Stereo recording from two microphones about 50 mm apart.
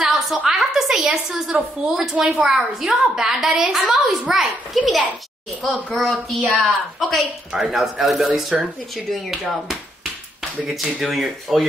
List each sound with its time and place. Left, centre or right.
0.0 s a sound: centre
0.5 s a woman's voice: centre
5.6 s a child's voice: centre
5.9 s speech: centre
8.5 s a woman's voice: centre
8.9 s speech: centre